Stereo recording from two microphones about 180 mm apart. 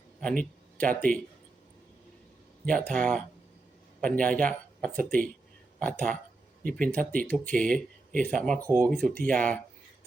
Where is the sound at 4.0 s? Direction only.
50° right (ahead or behind).